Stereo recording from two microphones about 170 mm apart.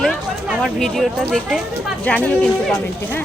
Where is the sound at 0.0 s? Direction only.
Centre (ahead or behind).